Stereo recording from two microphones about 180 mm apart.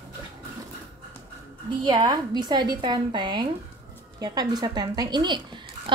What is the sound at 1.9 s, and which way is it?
A woman's voice, 20° right (ahead or behind).